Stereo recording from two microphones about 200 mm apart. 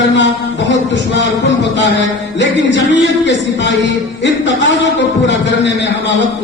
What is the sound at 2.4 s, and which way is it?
A man's voice, 65° left (ahead or behind).